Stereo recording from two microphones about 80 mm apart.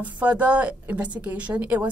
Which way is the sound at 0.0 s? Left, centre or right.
Centre.